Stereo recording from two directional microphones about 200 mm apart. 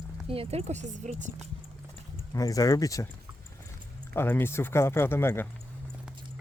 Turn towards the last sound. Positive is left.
turn(degrees=10)  # may be behind; listen again after turning